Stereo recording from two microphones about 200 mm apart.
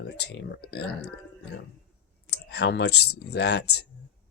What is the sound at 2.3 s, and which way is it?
Speech, 55° left (ahead or behind).